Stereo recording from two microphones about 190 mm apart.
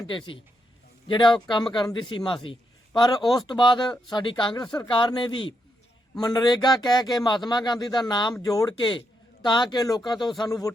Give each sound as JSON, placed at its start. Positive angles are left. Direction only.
{"t": 0.0, "sound": "speech", "side_deg": 25}